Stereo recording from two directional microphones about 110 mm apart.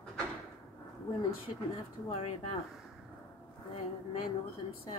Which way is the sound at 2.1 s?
70° left (ahead or behind).